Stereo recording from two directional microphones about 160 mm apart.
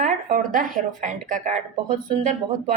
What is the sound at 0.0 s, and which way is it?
Speech, 55° right (ahead or behind).